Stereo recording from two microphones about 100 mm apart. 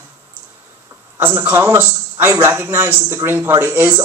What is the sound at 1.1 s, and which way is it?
A man's voice, 25° right (ahead or behind).